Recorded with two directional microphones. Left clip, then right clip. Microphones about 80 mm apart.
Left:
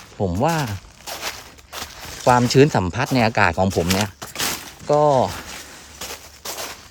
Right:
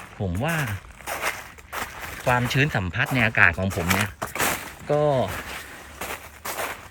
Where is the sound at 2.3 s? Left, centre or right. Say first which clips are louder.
Left 8 dB; left.